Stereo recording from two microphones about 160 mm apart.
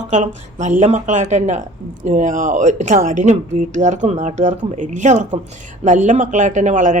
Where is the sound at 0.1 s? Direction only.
50° right (ahead or behind).